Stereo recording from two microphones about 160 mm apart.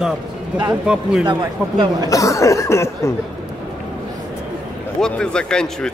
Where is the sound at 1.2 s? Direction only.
30° right (ahead or behind).